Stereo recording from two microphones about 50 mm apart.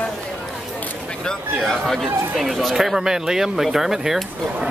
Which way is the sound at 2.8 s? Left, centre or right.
Centre.